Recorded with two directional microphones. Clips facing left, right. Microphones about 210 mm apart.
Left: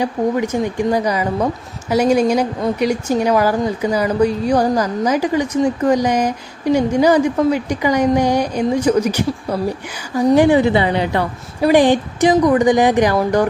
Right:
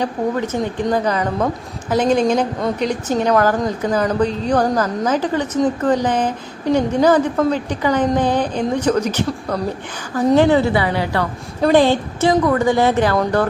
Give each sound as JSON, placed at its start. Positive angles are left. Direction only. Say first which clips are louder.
{"t": 0.0, "sound": "a woman's voice", "louder": "left 2 dB", "side_deg": 10}